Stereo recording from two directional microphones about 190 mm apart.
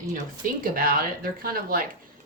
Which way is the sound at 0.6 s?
50° right (ahead or behind).